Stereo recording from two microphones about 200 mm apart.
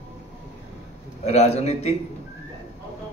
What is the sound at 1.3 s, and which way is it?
Speech, 35° left (ahead or behind).